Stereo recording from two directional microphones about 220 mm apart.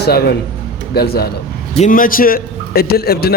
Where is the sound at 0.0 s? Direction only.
45° left (ahead or behind).